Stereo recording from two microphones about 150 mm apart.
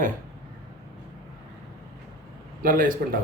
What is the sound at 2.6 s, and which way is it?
Speech, 65° right (ahead or behind).